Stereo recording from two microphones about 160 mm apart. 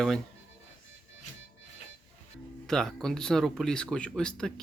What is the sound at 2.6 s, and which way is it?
Speech, 5° left (ahead or behind).